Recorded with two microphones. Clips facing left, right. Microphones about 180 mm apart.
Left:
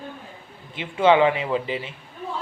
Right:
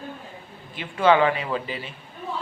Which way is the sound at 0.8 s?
20° left (ahead or behind).